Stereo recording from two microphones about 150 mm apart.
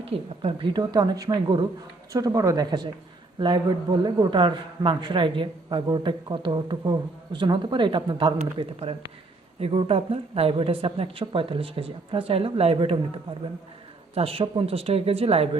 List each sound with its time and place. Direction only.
0.1 s a woman's voice: 40° right (ahead or behind)
0.4 s a woman's voice: 30° right (ahead or behind)
8.4 s a man's voice: 40° right (ahead or behind)
14.2 s a man's voice: 40° right (ahead or behind)